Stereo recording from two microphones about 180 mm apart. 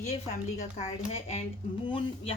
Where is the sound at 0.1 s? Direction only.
35° left (ahead or behind).